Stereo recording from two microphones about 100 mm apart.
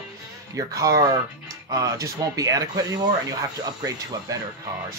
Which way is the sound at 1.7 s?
35° right (ahead or behind).